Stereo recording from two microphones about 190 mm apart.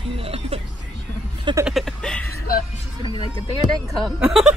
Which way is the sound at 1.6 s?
Centre (ahead or behind).